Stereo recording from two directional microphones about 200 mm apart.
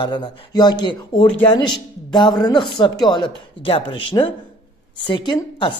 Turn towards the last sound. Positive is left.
turn(degrees=25)  # may be behind; listen again after turning